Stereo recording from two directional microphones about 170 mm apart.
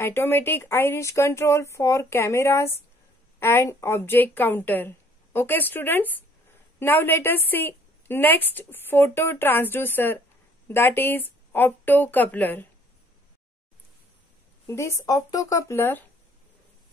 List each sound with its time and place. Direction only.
0.0 s a woman's voice: 15° left (ahead or behind)
14.7 s a woman's voice: 15° left (ahead or behind)